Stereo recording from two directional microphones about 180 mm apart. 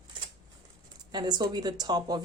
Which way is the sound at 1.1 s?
25° right (ahead or behind).